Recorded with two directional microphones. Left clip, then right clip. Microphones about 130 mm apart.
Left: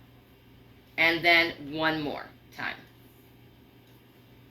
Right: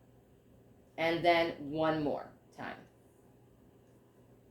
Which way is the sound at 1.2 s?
25° right (ahead or behind).